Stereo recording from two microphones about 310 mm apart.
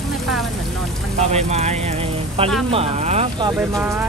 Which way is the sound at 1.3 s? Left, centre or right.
Right.